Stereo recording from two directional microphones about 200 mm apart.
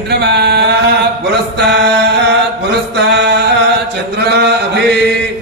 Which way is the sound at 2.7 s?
55° right (ahead or behind).